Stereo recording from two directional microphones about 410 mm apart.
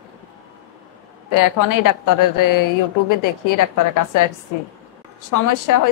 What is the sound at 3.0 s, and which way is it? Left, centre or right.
A woman's voice, left.